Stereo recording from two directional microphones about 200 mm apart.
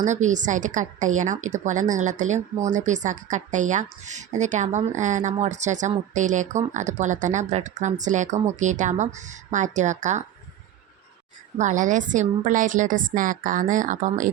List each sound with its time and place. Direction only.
0.0 s speech: 35° right (ahead or behind)
11.5 s speech: 40° right (ahead or behind)